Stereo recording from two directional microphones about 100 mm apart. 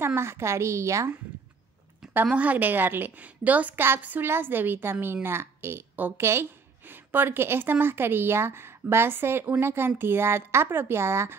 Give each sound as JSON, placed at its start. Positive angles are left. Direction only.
{"t": 0.0, "sound": "a woman's voice", "side_deg": -25}
{"t": 2.3, "sound": "a woman's voice", "side_deg": -15}